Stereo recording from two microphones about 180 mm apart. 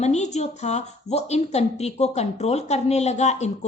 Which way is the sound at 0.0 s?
40° left (ahead or behind).